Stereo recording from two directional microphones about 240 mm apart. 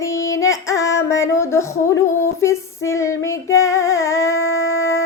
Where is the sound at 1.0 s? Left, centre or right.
Centre.